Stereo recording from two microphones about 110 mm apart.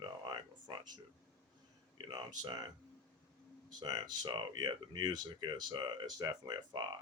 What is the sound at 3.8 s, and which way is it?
Speech, 40° right (ahead or behind).